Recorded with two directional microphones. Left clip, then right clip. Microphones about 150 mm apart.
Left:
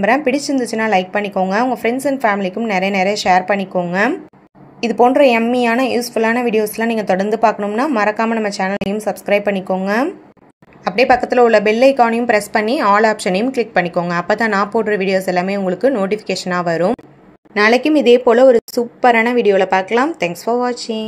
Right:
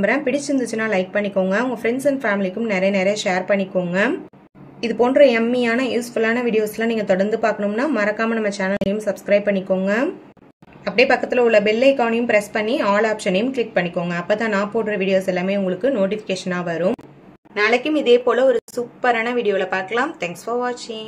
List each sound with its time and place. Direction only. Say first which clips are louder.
0.0 s a woman's voice: left 5 dB; 35° left (ahead or behind)